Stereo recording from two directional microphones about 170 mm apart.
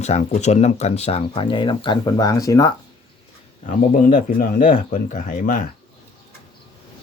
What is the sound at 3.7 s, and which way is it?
Speech, 50° left (ahead or behind).